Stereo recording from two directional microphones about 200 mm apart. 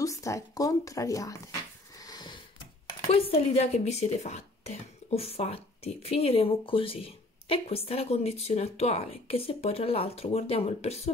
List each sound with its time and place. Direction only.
0.0 s speech: 15° left (ahead or behind)
2.0 s wheeze: 20° left (ahead or behind)
3.1 s speech: 30° left (ahead or behind)